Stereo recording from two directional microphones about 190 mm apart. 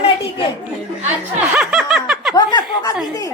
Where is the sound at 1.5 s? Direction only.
5° right (ahead or behind).